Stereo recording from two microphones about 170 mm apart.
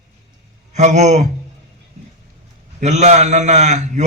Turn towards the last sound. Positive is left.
turn(degrees=-45)  # may be behind; listen again after turning